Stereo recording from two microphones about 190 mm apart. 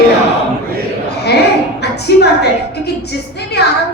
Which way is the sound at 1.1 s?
60° left (ahead or behind).